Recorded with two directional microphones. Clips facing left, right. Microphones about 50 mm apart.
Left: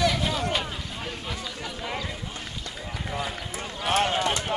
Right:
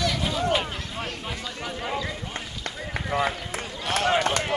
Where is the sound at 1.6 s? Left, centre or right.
Right.